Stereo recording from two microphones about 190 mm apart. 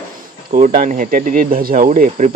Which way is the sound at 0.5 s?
45° right (ahead or behind).